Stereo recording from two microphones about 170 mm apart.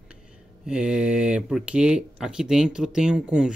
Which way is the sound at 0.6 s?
5° right (ahead or behind).